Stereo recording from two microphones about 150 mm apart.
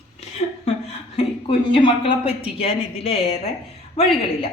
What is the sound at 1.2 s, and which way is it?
A woman's voice, 35° left (ahead or behind).